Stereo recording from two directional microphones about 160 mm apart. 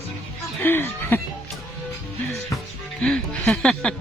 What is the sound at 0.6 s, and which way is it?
Speech, 15° left (ahead or behind).